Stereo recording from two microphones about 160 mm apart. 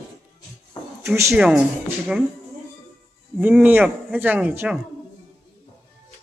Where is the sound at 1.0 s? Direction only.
15° right (ahead or behind).